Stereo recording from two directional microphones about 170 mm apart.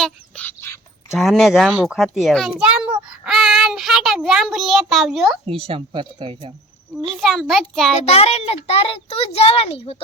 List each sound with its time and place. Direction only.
0.0 s bird: 10° left (ahead or behind)
1.1 s a child's voice: centre (ahead or behind)
3.1 s child singing: centre (ahead or behind)
5.5 s speech: 35° right (ahead or behind)
6.9 s a child's voice: centre (ahead or behind)
7.9 s a child's voice: 35° left (ahead or behind)